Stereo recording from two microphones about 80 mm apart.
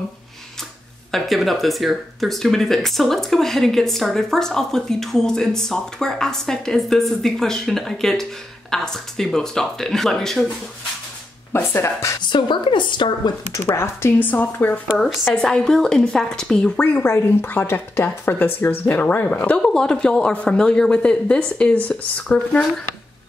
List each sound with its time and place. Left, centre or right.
1.1 s speech: centre
11.5 s speech: left
12.2 s a woman's voice: left
13.7 s a woman's voice: left
15.4 s a woman's voice: centre